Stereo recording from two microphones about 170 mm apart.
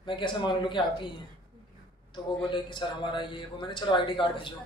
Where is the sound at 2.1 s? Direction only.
30° left (ahead or behind).